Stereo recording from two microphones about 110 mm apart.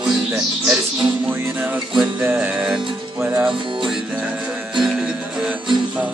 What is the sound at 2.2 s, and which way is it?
Music, 15° right (ahead or behind).